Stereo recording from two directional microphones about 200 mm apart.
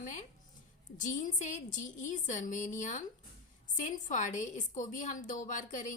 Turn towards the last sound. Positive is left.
turn(degrees=40)  # may be behind; listen again after turning